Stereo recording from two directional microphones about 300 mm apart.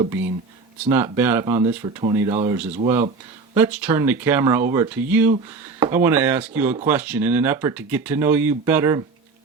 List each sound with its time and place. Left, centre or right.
0.0 s speech: centre